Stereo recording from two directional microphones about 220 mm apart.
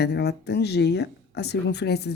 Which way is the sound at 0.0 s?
50° left (ahead or behind).